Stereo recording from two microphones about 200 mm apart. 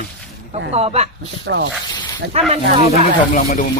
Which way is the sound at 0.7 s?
30° right (ahead or behind).